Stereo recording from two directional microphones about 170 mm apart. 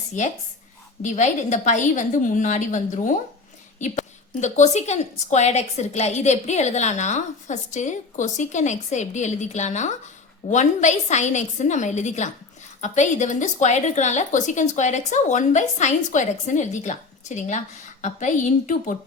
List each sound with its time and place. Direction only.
0.1 s a woman's voice: 45° left (ahead or behind)